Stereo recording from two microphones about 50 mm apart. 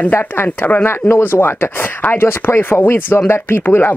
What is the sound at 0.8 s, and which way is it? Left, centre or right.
Speech, left.